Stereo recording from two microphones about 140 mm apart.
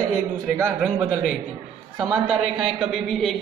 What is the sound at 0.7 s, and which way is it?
A man's voice, 5° right (ahead or behind).